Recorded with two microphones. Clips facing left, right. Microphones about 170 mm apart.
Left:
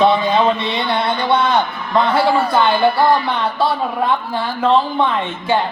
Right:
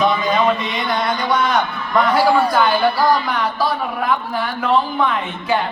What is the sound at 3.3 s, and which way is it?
A man's voice, 30° left (ahead or behind).